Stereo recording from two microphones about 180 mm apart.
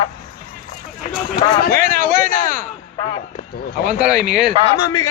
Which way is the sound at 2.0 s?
50° left (ahead or behind).